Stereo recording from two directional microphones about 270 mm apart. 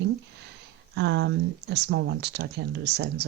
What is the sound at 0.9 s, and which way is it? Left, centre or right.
Speech, right.